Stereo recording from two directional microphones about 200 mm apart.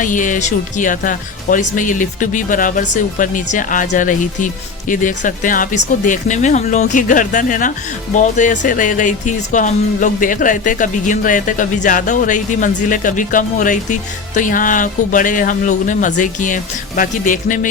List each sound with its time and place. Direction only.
0.0 s speech: 40° left (ahead or behind)